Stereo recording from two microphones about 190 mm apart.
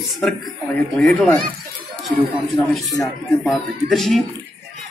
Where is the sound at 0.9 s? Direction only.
Centre (ahead or behind).